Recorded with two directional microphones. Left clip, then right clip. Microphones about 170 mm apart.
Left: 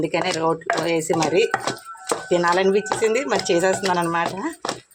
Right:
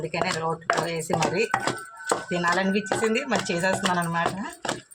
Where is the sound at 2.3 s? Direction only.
65° left (ahead or behind).